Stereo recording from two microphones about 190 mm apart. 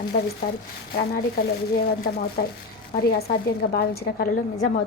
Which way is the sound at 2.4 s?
55° left (ahead or behind).